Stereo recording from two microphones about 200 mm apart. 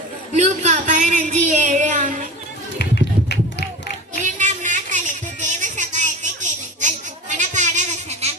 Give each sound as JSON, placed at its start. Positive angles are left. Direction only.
{"t": 0.3, "sound": "speech", "side_deg": -35}
{"t": 2.7, "sound": "run", "side_deg": 55}
{"t": 4.2, "sound": "a sound", "side_deg": -40}